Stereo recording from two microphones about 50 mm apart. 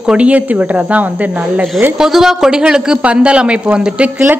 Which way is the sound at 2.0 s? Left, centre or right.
Centre.